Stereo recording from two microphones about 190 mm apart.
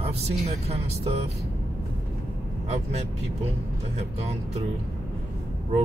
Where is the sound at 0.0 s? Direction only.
30° right (ahead or behind).